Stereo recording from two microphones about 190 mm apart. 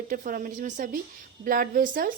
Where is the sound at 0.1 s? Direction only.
45° right (ahead or behind).